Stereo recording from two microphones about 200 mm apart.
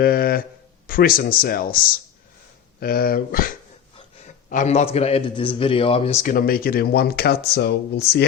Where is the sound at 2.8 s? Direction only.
50° left (ahead or behind).